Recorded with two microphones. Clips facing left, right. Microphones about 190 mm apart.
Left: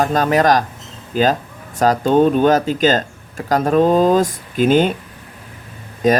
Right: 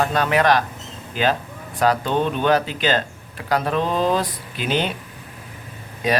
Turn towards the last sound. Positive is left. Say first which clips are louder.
# left 6 dB
turn(degrees=45)  # may be behind; listen again after turning